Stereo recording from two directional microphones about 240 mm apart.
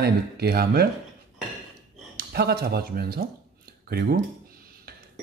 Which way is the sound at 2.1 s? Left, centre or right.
Right.